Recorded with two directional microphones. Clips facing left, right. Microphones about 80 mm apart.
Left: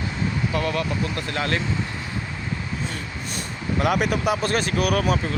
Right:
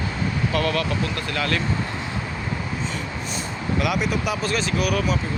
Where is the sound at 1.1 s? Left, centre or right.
Left.